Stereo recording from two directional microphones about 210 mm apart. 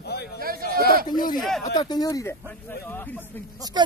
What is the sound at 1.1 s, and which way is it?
Speech, 20° left (ahead or behind).